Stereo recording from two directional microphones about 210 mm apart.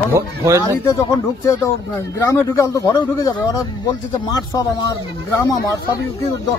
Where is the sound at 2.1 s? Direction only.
15° left (ahead or behind).